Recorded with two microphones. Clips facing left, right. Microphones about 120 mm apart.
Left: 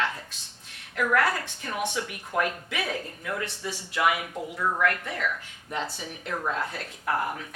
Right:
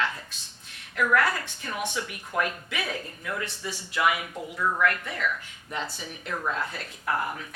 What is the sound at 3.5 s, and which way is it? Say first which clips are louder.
Speech: left 1 dB; 65° left (ahead or behind).